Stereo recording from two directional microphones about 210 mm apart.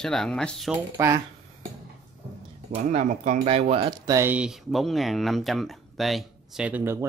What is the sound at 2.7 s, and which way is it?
Speech, 35° right (ahead or behind).